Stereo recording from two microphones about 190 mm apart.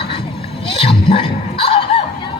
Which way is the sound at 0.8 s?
30° left (ahead or behind).